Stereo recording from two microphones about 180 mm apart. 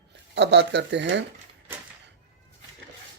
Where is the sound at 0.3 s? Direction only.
70° right (ahead or behind).